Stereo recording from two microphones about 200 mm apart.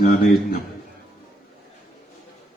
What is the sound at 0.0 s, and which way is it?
Speech, 45° left (ahead or behind).